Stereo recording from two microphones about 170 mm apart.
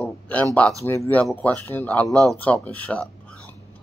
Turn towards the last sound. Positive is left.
turn(degrees=10)  # may be behind; listen again after turning